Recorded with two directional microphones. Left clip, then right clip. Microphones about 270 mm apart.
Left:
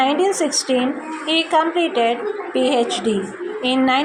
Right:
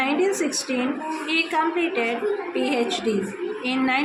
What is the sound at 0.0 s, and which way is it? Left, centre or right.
A woman's voice, centre.